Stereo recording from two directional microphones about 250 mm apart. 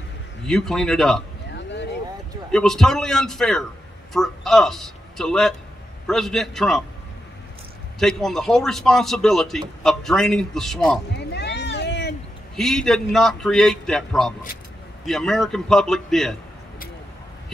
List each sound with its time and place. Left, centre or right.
0.5 s a man's voice: centre
1.5 s a sound: left
2.5 s a man's voice: centre
8.0 s a man's voice: centre
11.1 s a sound: left
12.5 s a man's voice: centre